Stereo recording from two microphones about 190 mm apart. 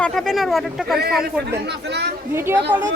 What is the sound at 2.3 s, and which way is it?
Speech, 10° right (ahead or behind).